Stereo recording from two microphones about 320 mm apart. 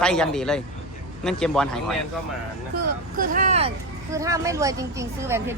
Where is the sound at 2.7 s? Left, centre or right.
Right.